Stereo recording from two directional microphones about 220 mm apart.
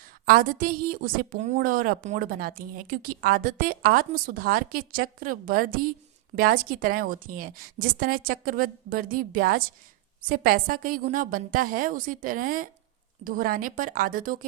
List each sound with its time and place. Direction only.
0.3 s a woman's voice: 40° right (ahead or behind)